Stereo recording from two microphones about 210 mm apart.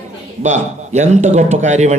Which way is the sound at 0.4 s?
35° right (ahead or behind).